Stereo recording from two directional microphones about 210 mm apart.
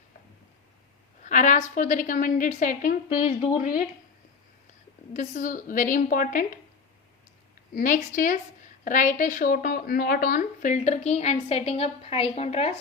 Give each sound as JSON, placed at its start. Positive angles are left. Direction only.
{"t": 1.2, "sound": "speech", "side_deg": 35}
{"t": 5.1, "sound": "speech", "side_deg": 35}
{"t": 7.8, "sound": "speech", "side_deg": 40}